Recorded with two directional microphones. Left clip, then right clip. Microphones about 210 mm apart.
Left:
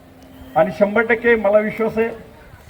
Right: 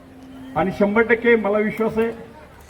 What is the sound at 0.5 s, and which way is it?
A man's voice, 25° left (ahead or behind).